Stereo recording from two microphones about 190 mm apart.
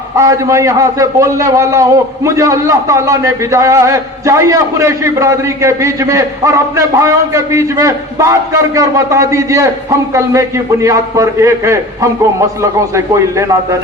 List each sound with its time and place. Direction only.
0.2 s a man's voice: 15° right (ahead or behind)
10.8 s a man's voice: 15° right (ahead or behind)
13.1 s a man's voice: 15° right (ahead or behind)